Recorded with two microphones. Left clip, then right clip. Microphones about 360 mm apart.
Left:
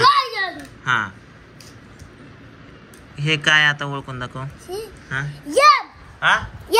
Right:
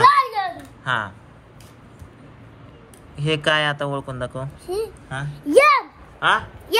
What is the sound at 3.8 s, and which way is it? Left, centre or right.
Speech, right.